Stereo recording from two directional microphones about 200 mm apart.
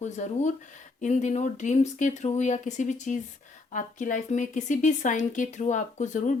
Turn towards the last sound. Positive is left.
turn(degrees=40)  # may be behind; listen again after turning